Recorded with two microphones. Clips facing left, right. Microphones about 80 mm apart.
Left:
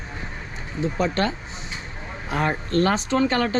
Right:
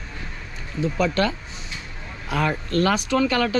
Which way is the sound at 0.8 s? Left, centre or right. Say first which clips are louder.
Right 1 dB; left.